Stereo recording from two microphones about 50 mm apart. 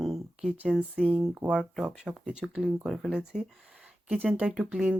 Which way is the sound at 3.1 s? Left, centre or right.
Centre.